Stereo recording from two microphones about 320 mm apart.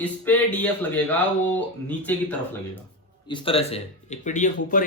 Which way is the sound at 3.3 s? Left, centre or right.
Centre.